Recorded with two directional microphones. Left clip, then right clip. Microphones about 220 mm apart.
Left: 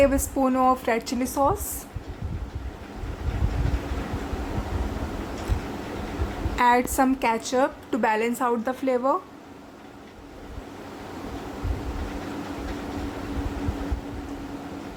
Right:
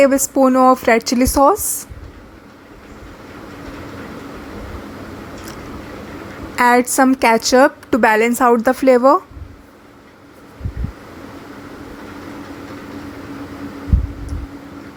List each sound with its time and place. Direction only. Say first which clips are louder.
0.0 s a woman's voice: right 9 dB; 20° right (ahead or behind)
6.6 s a woman's voice: right 8 dB; 25° right (ahead or behind)